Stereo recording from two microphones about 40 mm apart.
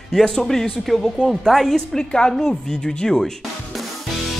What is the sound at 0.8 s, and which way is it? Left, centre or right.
A man's voice, centre.